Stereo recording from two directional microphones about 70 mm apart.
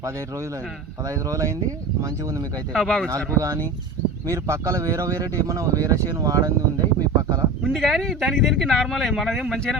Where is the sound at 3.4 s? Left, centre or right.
Right.